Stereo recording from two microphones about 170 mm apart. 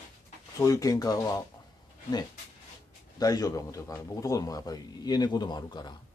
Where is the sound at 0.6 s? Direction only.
20° left (ahead or behind).